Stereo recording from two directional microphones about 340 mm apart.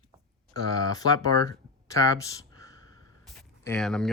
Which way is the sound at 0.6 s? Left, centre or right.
Centre.